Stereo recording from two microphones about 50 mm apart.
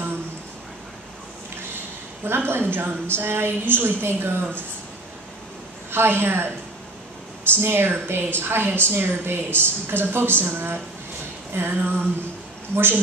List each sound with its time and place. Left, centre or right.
2.2 s a woman's voice: right
5.9 s a woman's voice: right
7.5 s a woman's voice: right